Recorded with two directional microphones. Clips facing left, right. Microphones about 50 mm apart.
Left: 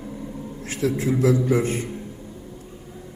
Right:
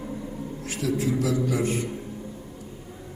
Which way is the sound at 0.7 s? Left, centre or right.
Left.